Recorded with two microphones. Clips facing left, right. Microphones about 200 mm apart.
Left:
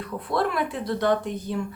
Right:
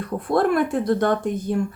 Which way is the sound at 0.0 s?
50° right (ahead or behind).